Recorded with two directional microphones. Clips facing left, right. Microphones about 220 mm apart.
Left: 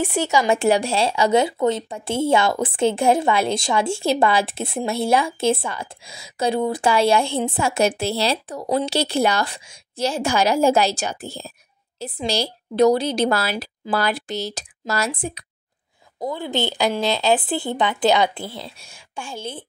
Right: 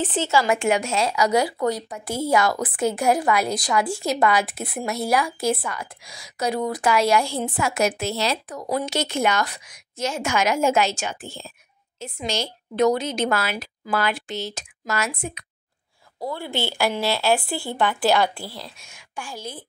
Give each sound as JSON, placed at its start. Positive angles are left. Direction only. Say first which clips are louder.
{"t": 0.0, "sound": "speech", "louder": "left 2 dB", "side_deg": 10}
{"t": 0.5, "sound": "speech", "louder": "left 3 dB", "side_deg": 35}
{"t": 16.2, "sound": "speech", "louder": "left 3 dB", "side_deg": 20}
{"t": 18.8, "sound": "speech", "louder": "left 2 dB", "side_deg": 30}